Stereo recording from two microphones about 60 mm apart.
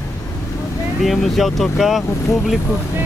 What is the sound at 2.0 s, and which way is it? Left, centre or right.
Speech, left.